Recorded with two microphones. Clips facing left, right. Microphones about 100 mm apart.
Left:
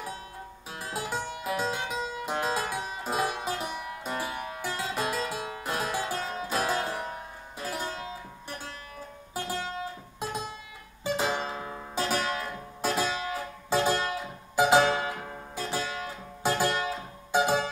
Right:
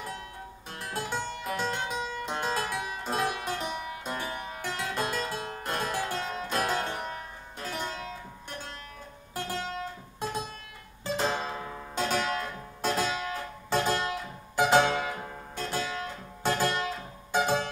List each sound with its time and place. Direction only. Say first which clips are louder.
0.7 s music: even; 5° left (ahead or behind)
11.1 s music: left 1 dB; 5° left (ahead or behind)